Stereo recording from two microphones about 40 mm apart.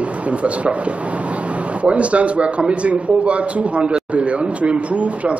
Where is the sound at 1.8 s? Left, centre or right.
Right.